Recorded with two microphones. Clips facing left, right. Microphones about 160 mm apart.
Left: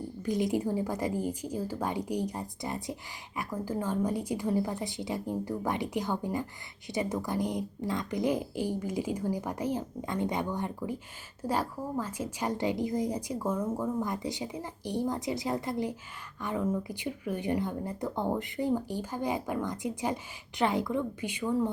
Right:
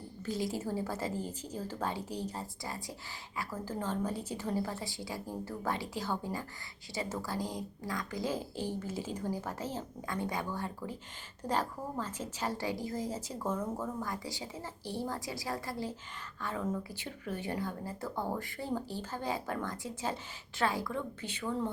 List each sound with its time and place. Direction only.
0.2 s a woman's voice: 15° left (ahead or behind)